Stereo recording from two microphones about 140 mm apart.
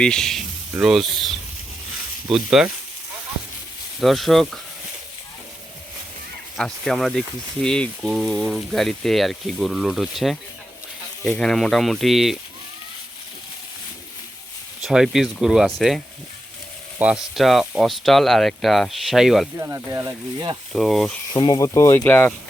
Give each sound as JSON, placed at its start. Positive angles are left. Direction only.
{"t": 0.0, "sound": "speech", "side_deg": 5}
{"t": 4.0, "sound": "speech", "side_deg": 0}
{"t": 6.6, "sound": "speech", "side_deg": 5}
{"t": 14.8, "sound": "speech", "side_deg": 0}
{"t": 17.0, "sound": "speech", "side_deg": -5}
{"t": 19.5, "sound": "speech", "side_deg": -20}
{"t": 20.7, "sound": "speech", "side_deg": 0}
{"t": 21.3, "sound": "speech", "side_deg": 30}
{"t": 22.0, "sound": "speech", "side_deg": 10}